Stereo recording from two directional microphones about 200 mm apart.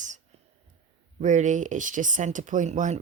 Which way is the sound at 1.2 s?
40° right (ahead or behind).